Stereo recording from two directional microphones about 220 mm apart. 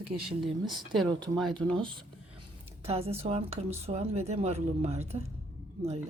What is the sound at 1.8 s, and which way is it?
Speech, 20° right (ahead or behind).